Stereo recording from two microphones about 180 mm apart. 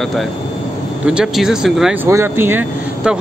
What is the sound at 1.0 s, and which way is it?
Speech, 5° right (ahead or behind).